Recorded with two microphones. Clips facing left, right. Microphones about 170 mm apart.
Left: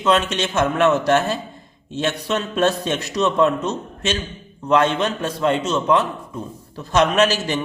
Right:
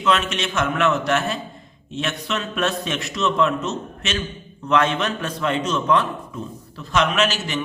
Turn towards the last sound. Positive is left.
turn(degrees=40)  # may be behind; listen again after turning